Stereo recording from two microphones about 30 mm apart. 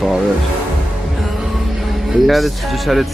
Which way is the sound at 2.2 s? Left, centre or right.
Centre.